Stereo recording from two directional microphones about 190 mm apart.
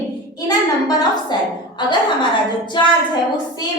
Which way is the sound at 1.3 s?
25° left (ahead or behind).